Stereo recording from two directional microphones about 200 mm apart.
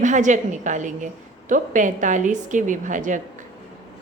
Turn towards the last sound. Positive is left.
turn(degrees=-40)  # may be behind; listen again after turning